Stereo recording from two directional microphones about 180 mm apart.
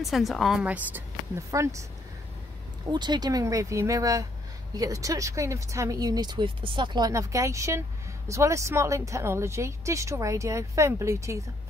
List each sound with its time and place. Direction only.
0.0 s speech: centre (ahead or behind); by 1.9 s 15° right (ahead or behind)
2.9 s speech: 25° right (ahead or behind)